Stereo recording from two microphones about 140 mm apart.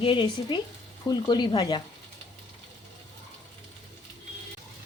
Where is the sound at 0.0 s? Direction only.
35° left (ahead or behind).